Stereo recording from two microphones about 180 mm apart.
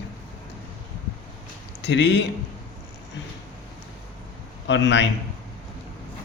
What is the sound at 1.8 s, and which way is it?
Speech, 75° left (ahead or behind).